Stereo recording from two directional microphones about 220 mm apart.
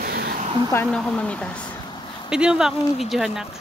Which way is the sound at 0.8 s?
Centre (ahead or behind).